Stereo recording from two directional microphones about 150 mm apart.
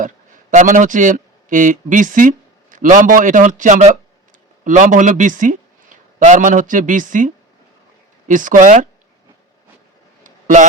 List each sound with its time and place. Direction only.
0.5 s a man's voice: 55° right (ahead or behind)
8.3 s speech: 60° right (ahead or behind)
10.2 s a sound: 55° right (ahead or behind)